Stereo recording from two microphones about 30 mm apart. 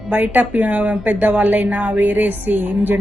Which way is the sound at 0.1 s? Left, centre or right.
Right.